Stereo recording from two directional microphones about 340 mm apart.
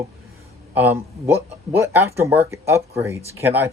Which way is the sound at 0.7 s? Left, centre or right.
Centre.